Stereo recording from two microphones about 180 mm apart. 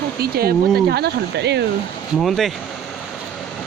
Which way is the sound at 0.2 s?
60° right (ahead or behind).